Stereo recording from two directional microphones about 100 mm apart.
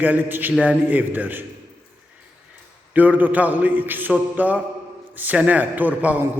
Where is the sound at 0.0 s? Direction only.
20° right (ahead or behind).